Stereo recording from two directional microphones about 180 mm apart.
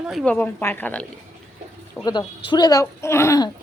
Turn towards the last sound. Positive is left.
turn(degrees=15)  # may be behind; listen again after turning